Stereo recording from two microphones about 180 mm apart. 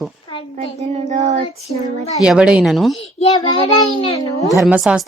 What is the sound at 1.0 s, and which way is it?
Child singing, 40° right (ahead or behind).